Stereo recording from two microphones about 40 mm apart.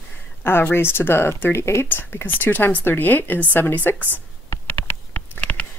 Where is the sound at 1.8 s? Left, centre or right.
Left.